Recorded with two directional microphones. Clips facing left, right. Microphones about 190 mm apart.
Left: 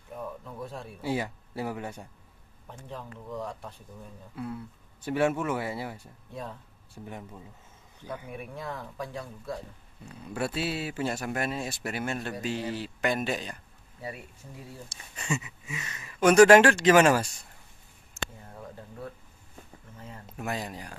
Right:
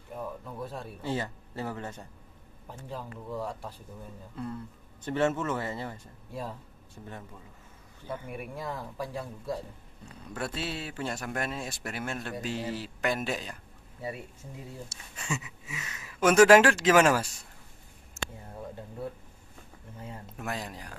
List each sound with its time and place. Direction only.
0.1 s speech: 5° right (ahead or behind)
1.0 s speech: 10° left (ahead or behind)
2.7 s speech: 5° right (ahead or behind)
4.4 s speech: 5° left (ahead or behind)
8.3 s speech: 5° right (ahead or behind)
10.2 s speech: 10° left (ahead or behind)
14.0 s speech: 25° right (ahead or behind)
15.1 s speech: centre (ahead or behind)
20.3 s speech: 5° left (ahead or behind)